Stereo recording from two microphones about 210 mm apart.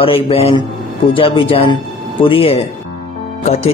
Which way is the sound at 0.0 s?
25° left (ahead or behind).